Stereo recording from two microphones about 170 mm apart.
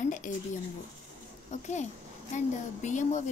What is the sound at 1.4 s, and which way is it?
Speech, 45° left (ahead or behind).